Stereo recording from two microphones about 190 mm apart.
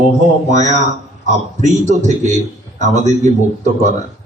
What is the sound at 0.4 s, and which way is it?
Speech, 40° right (ahead or behind).